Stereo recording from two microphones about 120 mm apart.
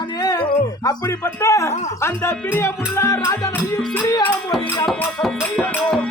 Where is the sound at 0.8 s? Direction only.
30° left (ahead or behind).